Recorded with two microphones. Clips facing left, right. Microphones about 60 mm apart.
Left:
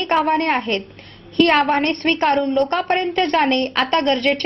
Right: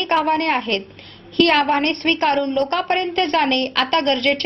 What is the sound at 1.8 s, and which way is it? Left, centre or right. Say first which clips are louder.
A woman's voice: left 1 dB; centre.